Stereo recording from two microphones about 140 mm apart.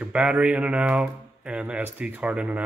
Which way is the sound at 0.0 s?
10° right (ahead or behind).